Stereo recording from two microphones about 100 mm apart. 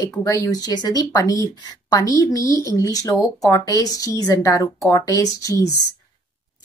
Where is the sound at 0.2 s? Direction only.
30° left (ahead or behind).